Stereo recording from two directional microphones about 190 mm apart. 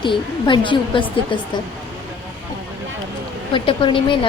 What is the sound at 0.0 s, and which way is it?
A woman's voice, 25° left (ahead or behind).